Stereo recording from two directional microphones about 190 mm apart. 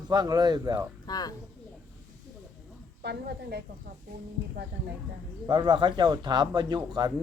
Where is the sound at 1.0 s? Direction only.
20° left (ahead or behind).